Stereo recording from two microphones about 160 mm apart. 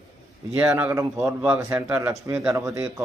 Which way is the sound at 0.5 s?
10° right (ahead or behind).